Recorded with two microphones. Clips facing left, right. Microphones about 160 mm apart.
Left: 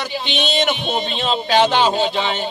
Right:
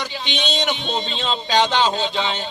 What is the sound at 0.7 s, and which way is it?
Speech, 15° left (ahead or behind).